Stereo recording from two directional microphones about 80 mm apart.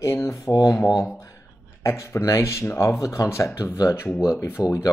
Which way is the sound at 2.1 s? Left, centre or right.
Left.